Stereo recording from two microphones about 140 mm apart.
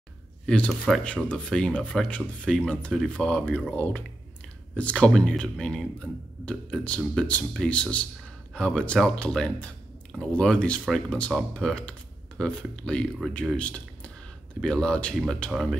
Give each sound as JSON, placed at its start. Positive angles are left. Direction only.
{"t": 0.5, "sound": "speech", "side_deg": 5}